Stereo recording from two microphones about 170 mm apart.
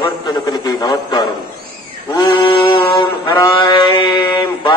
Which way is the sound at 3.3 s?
20° left (ahead or behind).